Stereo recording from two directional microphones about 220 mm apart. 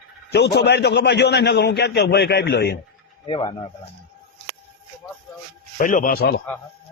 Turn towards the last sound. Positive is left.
turn(degrees=45)  # may be behind; listen again after turning